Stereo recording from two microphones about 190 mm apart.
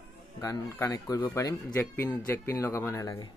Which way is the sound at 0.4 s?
15° left (ahead or behind).